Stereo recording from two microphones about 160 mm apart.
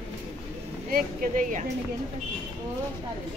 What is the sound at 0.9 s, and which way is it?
Speech, 60° right (ahead or behind).